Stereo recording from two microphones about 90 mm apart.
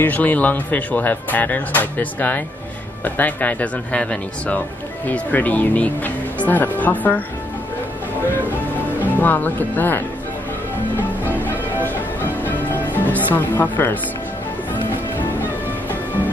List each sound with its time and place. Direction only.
0.0 s speech: 20° left (ahead or behind)
9.0 s speech: 20° left (ahead or behind)
11.4 s music: 20° left (ahead or behind)